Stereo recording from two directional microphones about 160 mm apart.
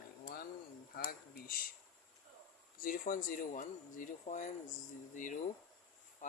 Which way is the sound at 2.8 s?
60° left (ahead or behind).